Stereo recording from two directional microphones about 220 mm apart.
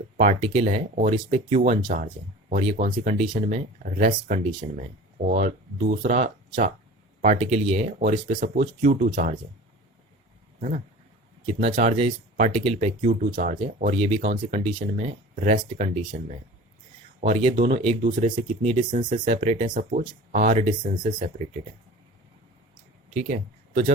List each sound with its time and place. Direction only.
0.2 s speech: 30° right (ahead or behind)
10.6 s speech: 35° right (ahead or behind)
23.0 s speech: 30° right (ahead or behind)